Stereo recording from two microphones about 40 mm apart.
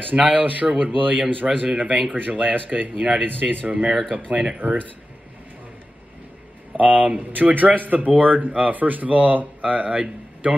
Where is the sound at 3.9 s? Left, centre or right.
Centre.